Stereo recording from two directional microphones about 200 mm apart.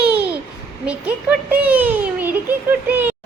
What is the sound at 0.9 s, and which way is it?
A child's voice, 5° right (ahead or behind).